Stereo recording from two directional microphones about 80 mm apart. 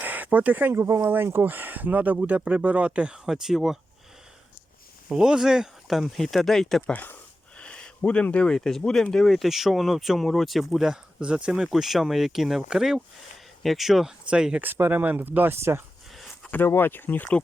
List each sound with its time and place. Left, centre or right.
0.0 s speech: right; by 3.8 s centre
5.0 s speech: centre
6.8 s speech: left; by 14.1 s centre
14.3 s speech: centre
14.6 s speech: right
16.1 s a sound: centre
16.5 s speech: left